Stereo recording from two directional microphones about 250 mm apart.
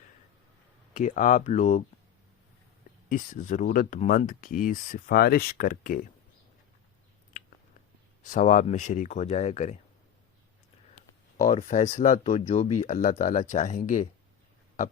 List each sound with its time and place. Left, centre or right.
0.9 s speech: left
3.1 s speech: left
8.2 s speech: left
11.4 s speech: left